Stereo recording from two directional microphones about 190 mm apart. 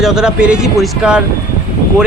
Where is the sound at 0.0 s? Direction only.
5° right (ahead or behind).